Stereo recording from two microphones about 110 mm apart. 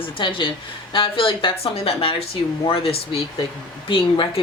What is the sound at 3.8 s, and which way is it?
Speech, 50° left (ahead or behind).